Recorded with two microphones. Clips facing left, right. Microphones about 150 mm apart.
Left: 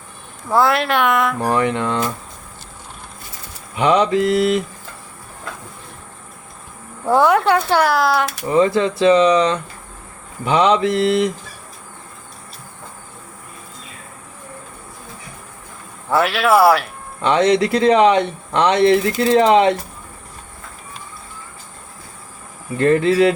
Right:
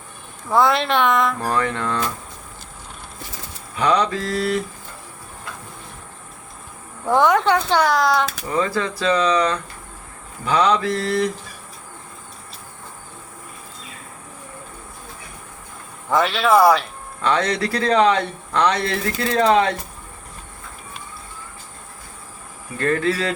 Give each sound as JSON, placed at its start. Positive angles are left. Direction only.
{"t": 0.5, "sound": "speech", "side_deg": 5}
{"t": 1.4, "sound": "speech", "side_deg": 20}
{"t": 3.8, "sound": "speech", "side_deg": 20}
{"t": 7.1, "sound": "speech", "side_deg": 10}
{"t": 8.4, "sound": "speech", "side_deg": 20}
{"t": 16.0, "sound": "speech", "side_deg": 5}
{"t": 17.2, "sound": "speech", "side_deg": 20}
{"t": 22.8, "sound": "speech", "side_deg": 20}